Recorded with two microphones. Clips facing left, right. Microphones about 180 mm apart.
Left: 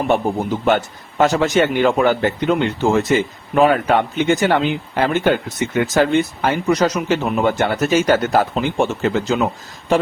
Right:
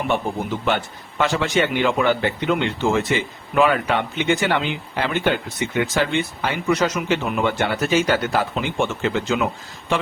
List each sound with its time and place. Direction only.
0.1 s a man's voice: 45° left (ahead or behind)